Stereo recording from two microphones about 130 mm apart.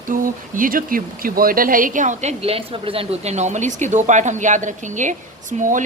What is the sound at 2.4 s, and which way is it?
Speech, 50° right (ahead or behind).